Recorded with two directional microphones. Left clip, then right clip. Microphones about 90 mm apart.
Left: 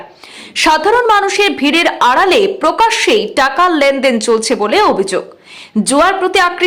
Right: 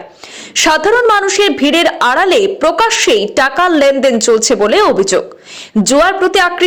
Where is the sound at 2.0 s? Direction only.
35° right (ahead or behind).